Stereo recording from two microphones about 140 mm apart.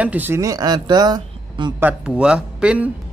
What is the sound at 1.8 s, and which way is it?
Speech, 5° right (ahead or behind).